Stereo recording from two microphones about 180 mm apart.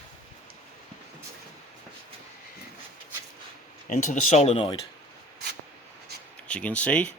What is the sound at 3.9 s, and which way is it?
Speech, 40° left (ahead or behind).